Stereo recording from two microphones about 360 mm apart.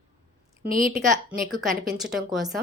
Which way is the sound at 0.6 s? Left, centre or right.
Right.